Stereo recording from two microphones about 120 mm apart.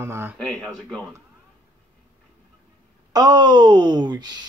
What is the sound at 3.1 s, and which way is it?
Speech, 35° right (ahead or behind).